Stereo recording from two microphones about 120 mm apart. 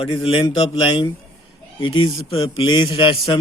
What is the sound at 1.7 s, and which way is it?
Speech, 45° left (ahead or behind).